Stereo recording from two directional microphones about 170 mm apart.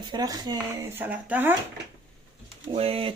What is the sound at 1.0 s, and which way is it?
Speech, 10° right (ahead or behind).